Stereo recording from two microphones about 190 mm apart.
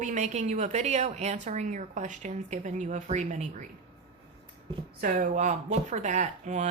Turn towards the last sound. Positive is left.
turn(degrees=-40)  # may be behind; listen again after turning